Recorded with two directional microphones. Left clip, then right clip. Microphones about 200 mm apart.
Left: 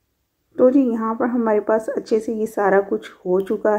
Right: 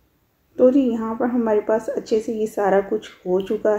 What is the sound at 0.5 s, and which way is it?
Speech, 25° left (ahead or behind).